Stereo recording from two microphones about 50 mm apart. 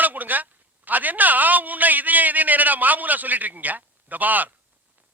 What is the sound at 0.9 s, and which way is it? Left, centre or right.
A man's voice, right.